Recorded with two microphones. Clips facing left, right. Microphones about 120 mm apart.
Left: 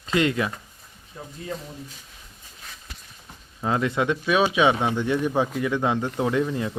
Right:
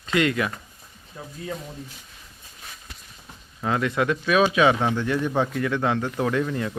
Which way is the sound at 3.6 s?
25° left (ahead or behind).